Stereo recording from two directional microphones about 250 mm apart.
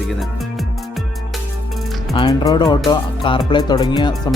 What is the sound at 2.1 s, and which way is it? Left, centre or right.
Speech, centre.